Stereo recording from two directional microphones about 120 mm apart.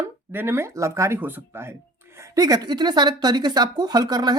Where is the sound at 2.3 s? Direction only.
30° right (ahead or behind).